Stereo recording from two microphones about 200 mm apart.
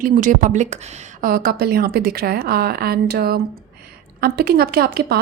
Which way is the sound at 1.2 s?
50° right (ahead or behind).